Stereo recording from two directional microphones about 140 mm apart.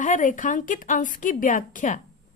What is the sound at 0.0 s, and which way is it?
A woman's voice, 70° left (ahead or behind).